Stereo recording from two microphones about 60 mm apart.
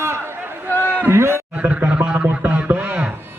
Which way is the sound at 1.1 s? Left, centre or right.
Right.